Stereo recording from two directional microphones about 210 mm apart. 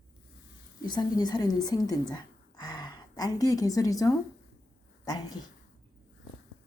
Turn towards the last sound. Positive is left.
turn(degrees=20)  # may be behind; listen again after turning